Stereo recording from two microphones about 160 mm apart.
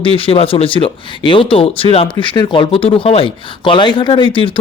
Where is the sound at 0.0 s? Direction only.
35° left (ahead or behind).